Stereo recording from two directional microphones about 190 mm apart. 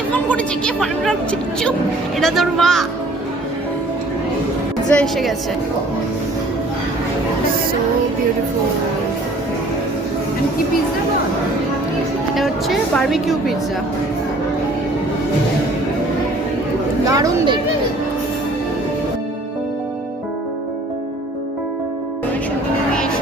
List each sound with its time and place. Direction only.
0.1 s a woman's voice: 5° left (ahead or behind)
4.9 s a woman's voice: 5° left (ahead or behind)
12.3 s a woman's voice: centre (ahead or behind)
17.1 s speech: 15° right (ahead or behind)